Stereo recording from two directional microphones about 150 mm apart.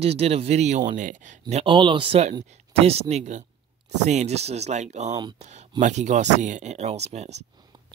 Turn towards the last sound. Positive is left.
turn(degrees=-45)  # may be behind; listen again after turning